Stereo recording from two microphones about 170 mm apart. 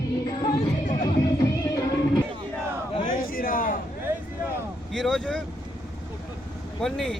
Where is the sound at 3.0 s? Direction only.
55° left (ahead or behind).